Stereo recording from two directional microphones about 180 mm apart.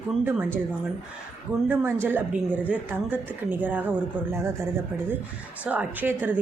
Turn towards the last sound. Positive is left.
turn(degrees=-10)  # may be behind; listen again after turning